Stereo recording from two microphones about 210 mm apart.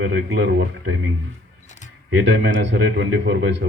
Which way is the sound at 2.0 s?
60° right (ahead or behind).